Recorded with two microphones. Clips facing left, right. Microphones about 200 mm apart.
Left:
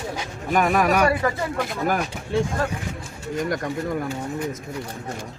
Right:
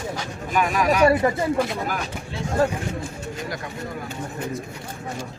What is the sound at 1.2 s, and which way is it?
Speech, 25° right (ahead or behind).